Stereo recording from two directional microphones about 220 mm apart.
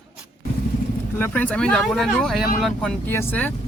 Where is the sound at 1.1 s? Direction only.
10° left (ahead or behind).